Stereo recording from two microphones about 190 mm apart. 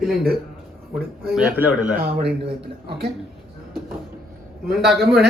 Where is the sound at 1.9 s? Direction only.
55° right (ahead or behind).